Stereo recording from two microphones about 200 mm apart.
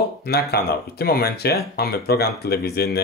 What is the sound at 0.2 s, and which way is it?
Speech, 50° left (ahead or behind).